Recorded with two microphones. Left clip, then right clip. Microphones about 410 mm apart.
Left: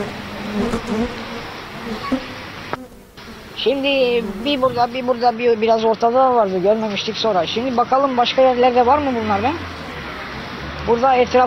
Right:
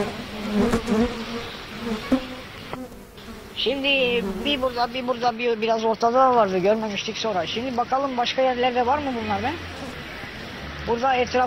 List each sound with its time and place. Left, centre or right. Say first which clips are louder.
0.6 s insect: even; centre
2.1 s a sound: right 1 dB; centre
3.6 s speech: left 5 dB; left
7.2 s speech: left 8 dB; left
10.9 s speech: left 7 dB; left